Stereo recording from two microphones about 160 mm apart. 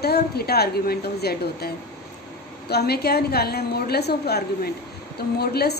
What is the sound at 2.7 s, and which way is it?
A woman's voice, 85° left.